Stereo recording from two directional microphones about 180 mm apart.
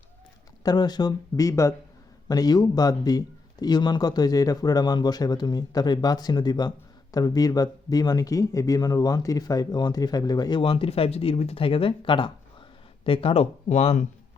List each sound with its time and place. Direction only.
0.6 s a man's voice: 20° left (ahead or behind); by 14.1 s 40° left (ahead or behind)